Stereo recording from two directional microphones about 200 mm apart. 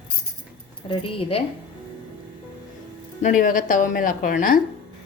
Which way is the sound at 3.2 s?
40° left (ahead or behind).